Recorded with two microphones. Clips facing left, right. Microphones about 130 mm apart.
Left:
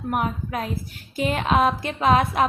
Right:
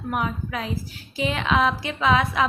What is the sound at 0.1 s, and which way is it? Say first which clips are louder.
A woman's voice: left 1 dB; 45° left (ahead or behind).